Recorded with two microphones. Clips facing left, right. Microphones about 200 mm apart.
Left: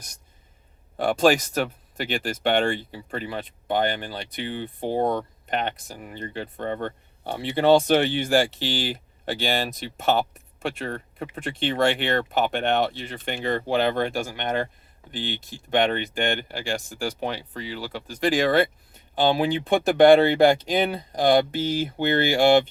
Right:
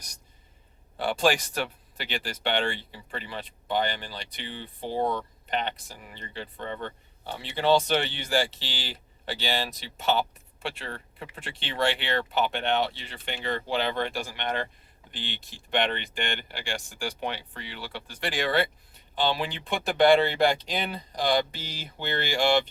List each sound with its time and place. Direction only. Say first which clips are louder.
0.9 s speech: left 5 dB; 45° left (ahead or behind)